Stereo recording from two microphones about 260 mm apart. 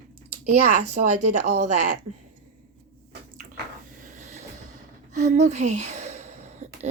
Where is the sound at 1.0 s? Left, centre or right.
Right.